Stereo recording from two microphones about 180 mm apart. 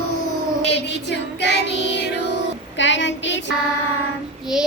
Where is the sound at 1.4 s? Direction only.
70° left (ahead or behind).